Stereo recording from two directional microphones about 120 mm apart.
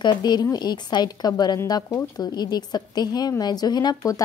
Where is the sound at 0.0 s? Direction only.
40° left (ahead or behind).